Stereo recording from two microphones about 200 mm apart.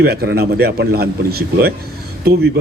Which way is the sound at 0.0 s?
50° right (ahead or behind).